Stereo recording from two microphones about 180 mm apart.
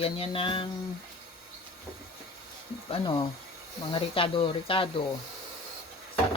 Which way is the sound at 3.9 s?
30° left (ahead or behind).